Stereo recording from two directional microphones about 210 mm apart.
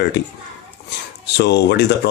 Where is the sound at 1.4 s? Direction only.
55° left (ahead or behind).